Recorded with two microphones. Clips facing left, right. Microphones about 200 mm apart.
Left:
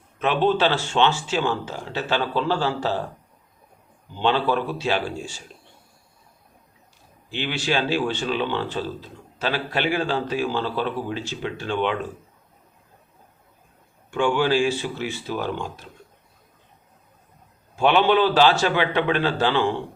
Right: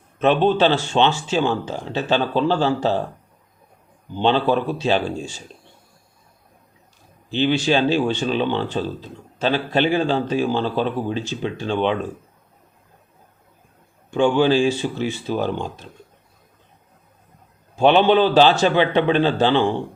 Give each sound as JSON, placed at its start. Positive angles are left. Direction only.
{"t": 0.2, "sound": "speech", "side_deg": -20}
{"t": 4.1, "sound": "speech", "side_deg": -20}
{"t": 7.4, "sound": "speech", "side_deg": -20}
{"t": 14.1, "sound": "speech", "side_deg": -20}
{"t": 17.9, "sound": "speech", "side_deg": -20}